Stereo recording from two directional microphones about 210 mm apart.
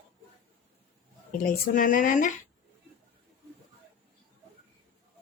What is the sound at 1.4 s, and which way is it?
Speech, 40° left (ahead or behind).